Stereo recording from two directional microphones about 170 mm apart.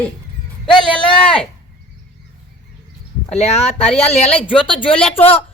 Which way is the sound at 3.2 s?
40° left (ahead or behind).